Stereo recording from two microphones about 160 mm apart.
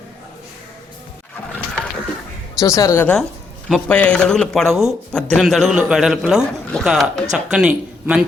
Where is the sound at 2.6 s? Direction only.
20° left (ahead or behind).